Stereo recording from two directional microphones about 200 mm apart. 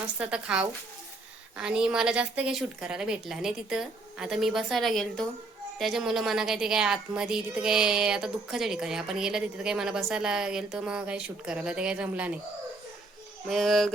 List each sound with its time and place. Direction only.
0.2 s a woman's voice: 5° right (ahead or behind)
13.5 s a woman's voice: centre (ahead or behind)